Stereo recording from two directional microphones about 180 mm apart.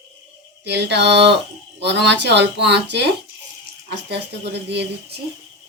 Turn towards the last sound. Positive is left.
turn(degrees=-70)  # may be behind; listen again after turning